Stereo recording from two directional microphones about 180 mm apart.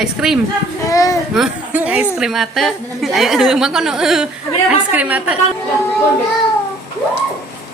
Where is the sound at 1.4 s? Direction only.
10° right (ahead or behind).